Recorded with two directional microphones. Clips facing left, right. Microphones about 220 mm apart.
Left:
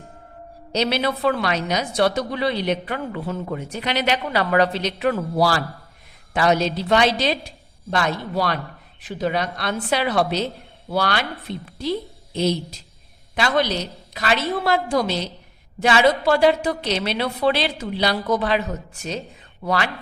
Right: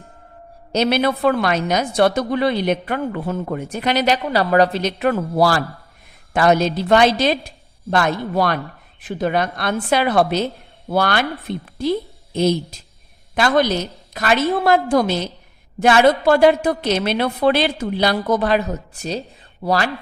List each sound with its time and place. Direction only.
0.7 s a woman's voice: 50° right (ahead or behind)